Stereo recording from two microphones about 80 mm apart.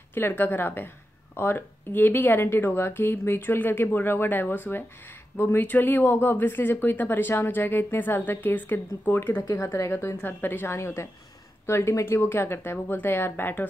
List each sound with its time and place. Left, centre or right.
0.1 s speech: left
9.4 s speech: left
9.8 s a woman's voice: left